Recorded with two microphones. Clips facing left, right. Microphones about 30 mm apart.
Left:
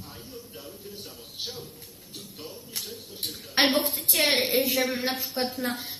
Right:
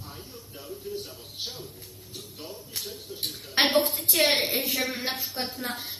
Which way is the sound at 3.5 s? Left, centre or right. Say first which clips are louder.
Even; centre.